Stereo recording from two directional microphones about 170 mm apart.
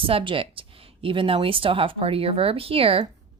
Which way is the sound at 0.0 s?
30° right (ahead or behind).